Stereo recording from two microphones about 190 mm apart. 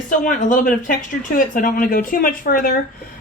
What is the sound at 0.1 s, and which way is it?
Speech, 40° left (ahead or behind).